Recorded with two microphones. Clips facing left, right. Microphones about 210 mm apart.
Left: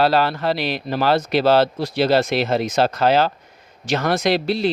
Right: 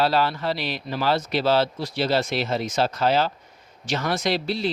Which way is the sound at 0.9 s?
65° left (ahead or behind).